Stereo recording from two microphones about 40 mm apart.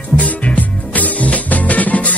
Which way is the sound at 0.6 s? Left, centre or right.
Left.